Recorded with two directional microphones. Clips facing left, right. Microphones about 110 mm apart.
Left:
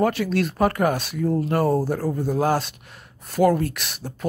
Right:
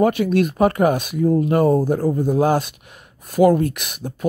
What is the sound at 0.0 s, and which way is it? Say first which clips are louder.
Speech: right 5 dB; 15° right (ahead or behind).